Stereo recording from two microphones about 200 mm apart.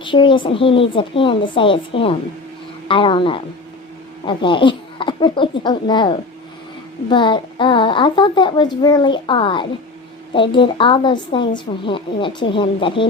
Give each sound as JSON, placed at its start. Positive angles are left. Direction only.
{"t": 0.0, "sound": "a woman's voice", "side_deg": 25}